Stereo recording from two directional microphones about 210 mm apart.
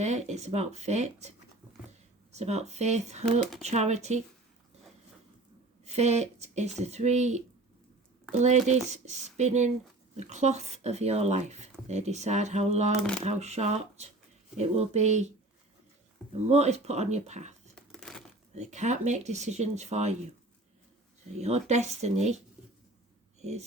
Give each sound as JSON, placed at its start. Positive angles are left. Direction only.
{"t": 0.0, "sound": "speech", "side_deg": -35}
{"t": 2.3, "sound": "speech", "side_deg": -30}
{"t": 5.8, "sound": "speech", "side_deg": -30}
{"t": 13.0, "sound": "speech", "side_deg": 5}
{"t": 13.2, "sound": "speech", "side_deg": -30}
{"t": 16.5, "sound": "speech", "side_deg": -30}
{"t": 17.7, "sound": "crumpling", "side_deg": 5}
{"t": 18.5, "sound": "speech", "side_deg": -35}
{"t": 21.3, "sound": "speech", "side_deg": -30}
{"t": 23.4, "sound": "speech", "side_deg": -30}